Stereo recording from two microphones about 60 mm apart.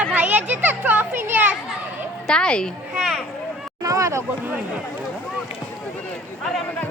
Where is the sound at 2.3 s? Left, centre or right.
Centre.